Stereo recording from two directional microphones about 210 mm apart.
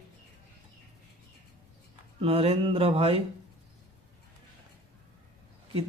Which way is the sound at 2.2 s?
25° right (ahead or behind).